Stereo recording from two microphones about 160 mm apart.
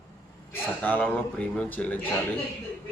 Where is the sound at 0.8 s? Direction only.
10° left (ahead or behind).